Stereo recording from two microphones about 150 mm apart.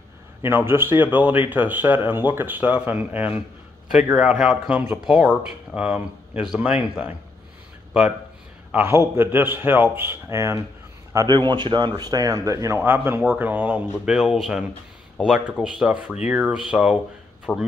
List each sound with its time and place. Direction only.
0.4 s speech: 15° right (ahead or behind)
8.7 s speech: 15° right (ahead or behind)
11.1 s speech: 30° right (ahead or behind); by 16.9 s 5° right (ahead or behind)
17.5 s speech: 15° left (ahead or behind)